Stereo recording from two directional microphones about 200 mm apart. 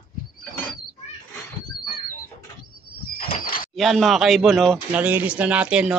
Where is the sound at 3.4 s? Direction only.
45° left (ahead or behind).